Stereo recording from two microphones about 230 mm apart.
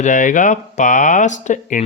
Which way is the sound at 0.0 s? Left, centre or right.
Left.